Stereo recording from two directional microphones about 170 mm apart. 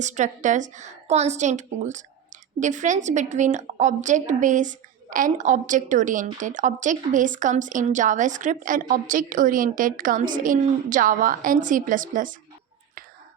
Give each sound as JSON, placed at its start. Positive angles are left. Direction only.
{"t": 0.0, "sound": "a woman's voice", "side_deg": -45}